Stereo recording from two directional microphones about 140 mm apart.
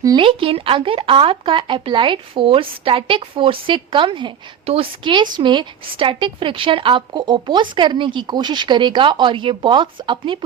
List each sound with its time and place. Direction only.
0.0 s speech: 25° right (ahead or behind)
0.3 s speech: 40° right (ahead or behind)